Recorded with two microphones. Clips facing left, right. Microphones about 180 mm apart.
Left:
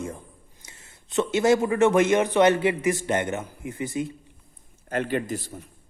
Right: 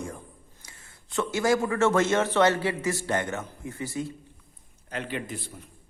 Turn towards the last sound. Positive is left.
turn(degrees=45)  # may be behind; listen again after turning